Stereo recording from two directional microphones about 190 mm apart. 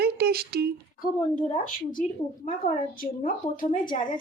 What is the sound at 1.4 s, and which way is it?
Speech, 45° left (ahead or behind).